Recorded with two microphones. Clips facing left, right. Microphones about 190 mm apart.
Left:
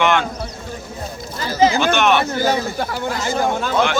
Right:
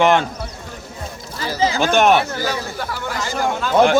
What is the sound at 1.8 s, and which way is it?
Speech, 40° right (ahead or behind).